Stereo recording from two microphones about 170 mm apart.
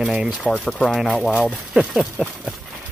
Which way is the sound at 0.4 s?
5° left (ahead or behind).